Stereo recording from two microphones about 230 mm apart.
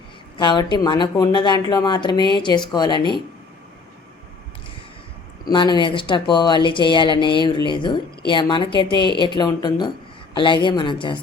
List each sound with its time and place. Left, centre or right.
0.3 s speech: centre
5.5 s speech: centre